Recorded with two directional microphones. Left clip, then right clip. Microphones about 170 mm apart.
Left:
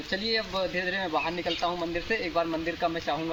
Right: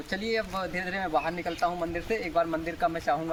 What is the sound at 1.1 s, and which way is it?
Speech, 5° right (ahead or behind).